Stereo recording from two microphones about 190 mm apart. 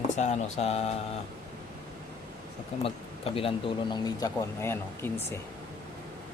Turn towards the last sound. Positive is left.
turn(degrees=15)  # may be behind; listen again after turning